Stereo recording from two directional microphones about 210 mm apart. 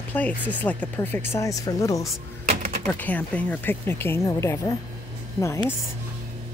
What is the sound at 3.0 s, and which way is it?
Speech, 5° left (ahead or behind).